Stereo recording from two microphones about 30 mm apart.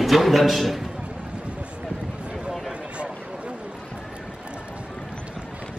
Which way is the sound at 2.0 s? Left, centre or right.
Right.